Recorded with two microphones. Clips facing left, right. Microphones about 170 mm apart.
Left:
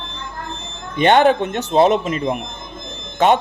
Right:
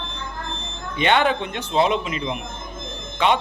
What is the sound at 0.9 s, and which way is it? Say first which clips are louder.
Speech: left 6 dB; 45° left (ahead or behind).